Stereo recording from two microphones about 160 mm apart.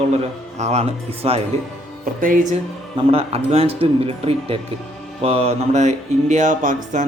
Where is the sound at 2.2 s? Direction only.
55° right (ahead or behind).